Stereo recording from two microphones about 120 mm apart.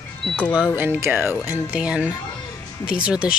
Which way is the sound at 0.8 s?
20° right (ahead or behind).